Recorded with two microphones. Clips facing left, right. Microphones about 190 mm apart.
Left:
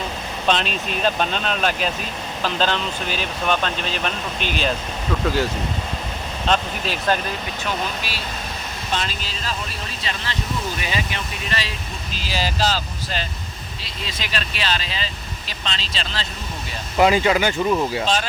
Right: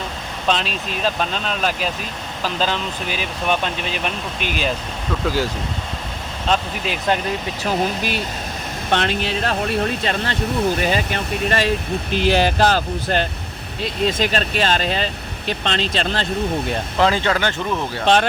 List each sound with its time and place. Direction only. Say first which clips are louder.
0.4 s speech: even; centre (ahead or behind)
6.5 s speech: right 1 dB; 15° right (ahead or behind)
8.9 s speech: right 8 dB; 65° right (ahead or behind)
17.0 s speech: left 2 dB; 10° left (ahead or behind)
18.0 s speech: right 6 dB; 60° right (ahead or behind)